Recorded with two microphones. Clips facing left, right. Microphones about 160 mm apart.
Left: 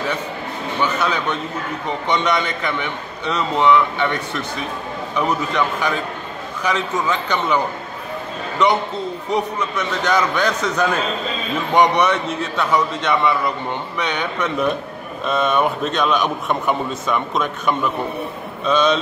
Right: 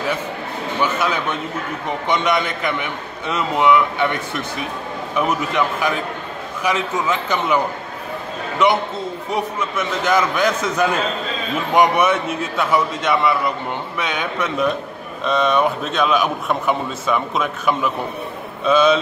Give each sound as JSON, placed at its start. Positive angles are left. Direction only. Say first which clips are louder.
{"t": 0.8, "sound": "a man's voice", "louder": "left 1 dB", "side_deg": -10}
{"t": 9.3, "sound": "a man's voice", "louder": "left 2 dB", "side_deg": -5}